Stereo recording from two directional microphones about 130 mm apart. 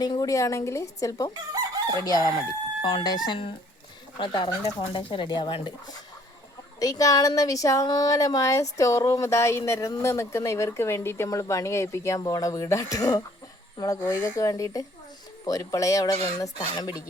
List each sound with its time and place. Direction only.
0.0 s speech: 30° left (ahead or behind)
6.7 s speech: 25° left (ahead or behind)
14.0 s speech: 20° left (ahead or behind)